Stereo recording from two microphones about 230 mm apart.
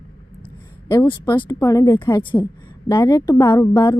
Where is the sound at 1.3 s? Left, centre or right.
Centre.